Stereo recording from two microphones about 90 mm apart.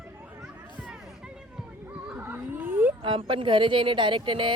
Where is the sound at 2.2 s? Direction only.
20° right (ahead or behind).